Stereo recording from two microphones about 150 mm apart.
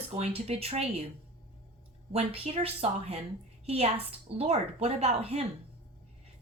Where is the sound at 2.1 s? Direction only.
40° right (ahead or behind).